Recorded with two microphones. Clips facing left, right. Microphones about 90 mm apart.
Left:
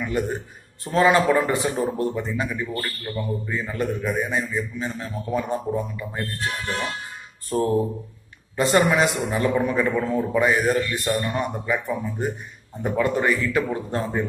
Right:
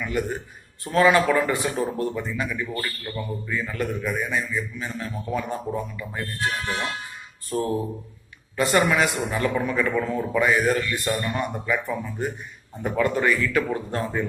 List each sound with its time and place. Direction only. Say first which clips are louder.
0.8 s a man's voice: left 1 dB; 25° left (ahead or behind)
7.4 s a man's voice: left 4 dB; 35° left (ahead or behind)